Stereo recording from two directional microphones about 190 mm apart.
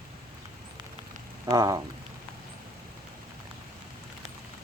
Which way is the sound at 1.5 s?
15° right (ahead or behind).